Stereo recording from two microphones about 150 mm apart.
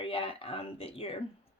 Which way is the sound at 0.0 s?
40° left (ahead or behind).